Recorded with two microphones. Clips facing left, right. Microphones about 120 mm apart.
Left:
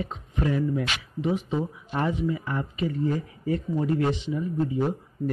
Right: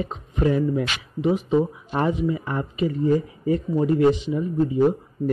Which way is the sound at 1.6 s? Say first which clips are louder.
Right 5 dB; 35° right (ahead or behind).